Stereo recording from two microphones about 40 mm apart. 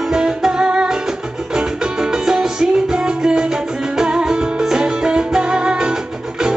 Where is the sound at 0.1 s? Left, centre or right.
Centre.